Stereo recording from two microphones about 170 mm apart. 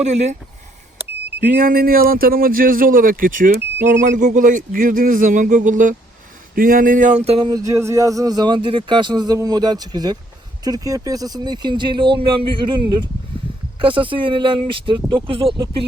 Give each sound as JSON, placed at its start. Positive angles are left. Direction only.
{"t": 0.0, "sound": "speech", "side_deg": -40}
{"t": 1.5, "sound": "speech", "side_deg": -55}